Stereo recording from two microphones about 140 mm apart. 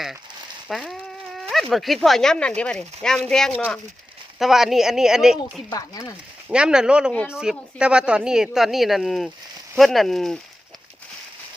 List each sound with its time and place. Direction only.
0.7 s speech: centre (ahead or behind)
4.4 s speech: centre (ahead or behind)
5.7 s speech: 25° left (ahead or behind)
6.5 s speech: 5° right (ahead or behind)